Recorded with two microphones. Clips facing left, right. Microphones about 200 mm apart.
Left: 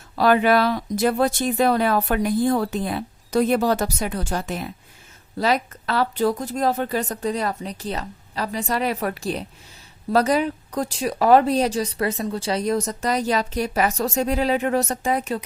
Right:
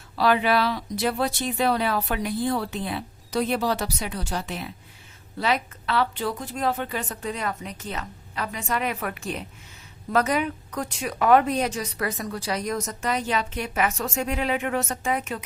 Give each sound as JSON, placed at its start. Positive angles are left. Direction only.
{"t": 0.2, "sound": "speech", "side_deg": 45}